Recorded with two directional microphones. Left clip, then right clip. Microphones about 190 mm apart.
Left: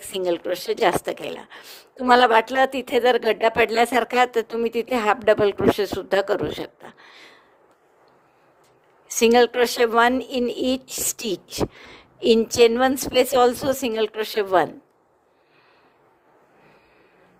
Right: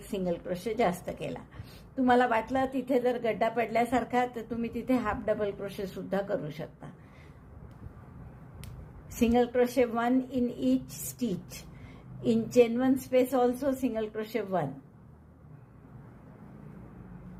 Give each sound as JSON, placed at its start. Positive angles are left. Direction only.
{"t": 0.2, "sound": "speech", "side_deg": 50}
{"t": 9.0, "sound": "speech", "side_deg": 50}